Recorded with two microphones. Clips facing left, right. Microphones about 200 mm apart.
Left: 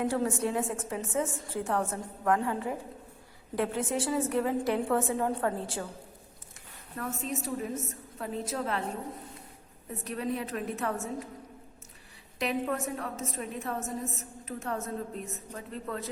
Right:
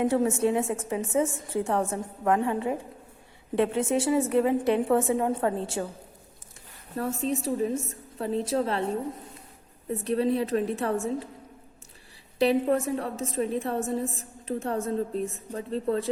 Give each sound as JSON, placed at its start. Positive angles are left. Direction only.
{"t": 0.0, "sound": "a woman's voice", "side_deg": -20}
{"t": 6.9, "sound": "a woman's voice", "side_deg": -30}
{"t": 10.0, "sound": "a woman's voice", "side_deg": -30}
{"t": 12.4, "sound": "a woman's voice", "side_deg": -30}